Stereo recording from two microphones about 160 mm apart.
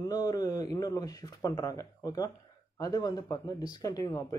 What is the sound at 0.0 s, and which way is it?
Speech, 25° left (ahead or behind).